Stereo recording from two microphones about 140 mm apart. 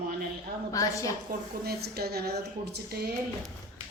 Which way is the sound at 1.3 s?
90° right.